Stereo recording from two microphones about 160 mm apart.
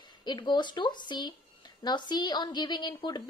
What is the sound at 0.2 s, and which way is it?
A woman's voice, 25° left (ahead or behind).